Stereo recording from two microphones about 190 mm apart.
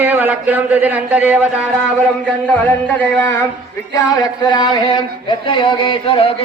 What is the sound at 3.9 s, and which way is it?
Music, 20° left (ahead or behind).